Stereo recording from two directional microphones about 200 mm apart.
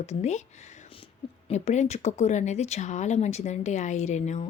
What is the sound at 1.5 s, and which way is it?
Speech, 35° left (ahead or behind).